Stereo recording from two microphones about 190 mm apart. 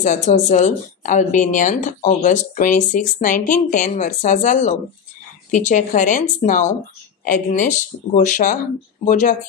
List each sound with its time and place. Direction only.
0.0 s speech: 40° left (ahead or behind)